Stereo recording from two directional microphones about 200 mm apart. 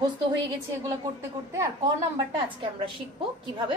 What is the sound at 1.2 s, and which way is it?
Speech, 15° right (ahead or behind).